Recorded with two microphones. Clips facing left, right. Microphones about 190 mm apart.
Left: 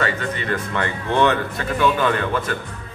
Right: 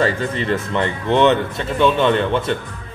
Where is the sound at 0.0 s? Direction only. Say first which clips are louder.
Right 5 dB; 30° right (ahead or behind).